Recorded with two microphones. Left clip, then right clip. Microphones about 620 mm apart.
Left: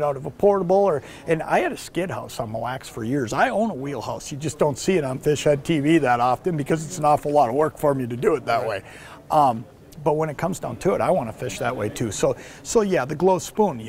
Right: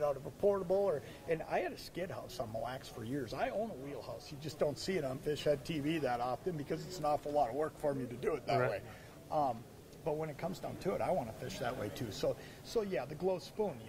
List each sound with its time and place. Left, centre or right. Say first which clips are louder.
0.0 s speech: left 13 dB; left
10.0 s speech: left 16 dB; left